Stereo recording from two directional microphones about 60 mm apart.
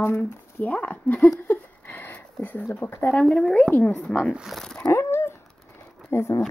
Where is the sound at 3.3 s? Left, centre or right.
Centre.